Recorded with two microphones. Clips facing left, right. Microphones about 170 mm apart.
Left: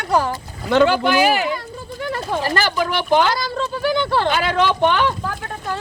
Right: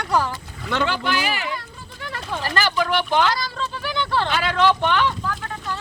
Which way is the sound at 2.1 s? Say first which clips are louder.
Left 4 dB; 40° left (ahead or behind).